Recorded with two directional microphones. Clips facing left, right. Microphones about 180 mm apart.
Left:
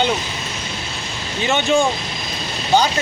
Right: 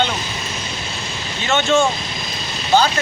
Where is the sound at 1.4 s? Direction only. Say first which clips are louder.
Even; 15° left (ahead or behind).